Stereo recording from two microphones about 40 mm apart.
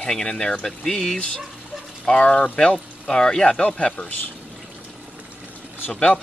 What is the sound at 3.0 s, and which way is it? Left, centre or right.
Speech, centre.